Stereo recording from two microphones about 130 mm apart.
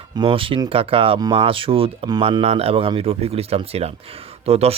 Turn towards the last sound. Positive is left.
turn(degrees=-50)  # may be behind; listen again after turning